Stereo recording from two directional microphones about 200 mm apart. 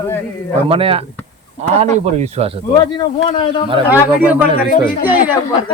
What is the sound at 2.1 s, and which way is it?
Speech, 35° right (ahead or behind).